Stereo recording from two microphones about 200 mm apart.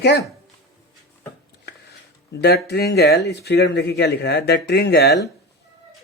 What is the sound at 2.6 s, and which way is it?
Speech, 50° left (ahead or behind).